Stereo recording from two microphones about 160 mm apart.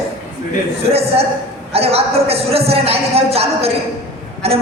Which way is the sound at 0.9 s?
40° right (ahead or behind).